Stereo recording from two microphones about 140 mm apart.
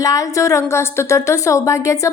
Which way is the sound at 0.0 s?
25° left (ahead or behind).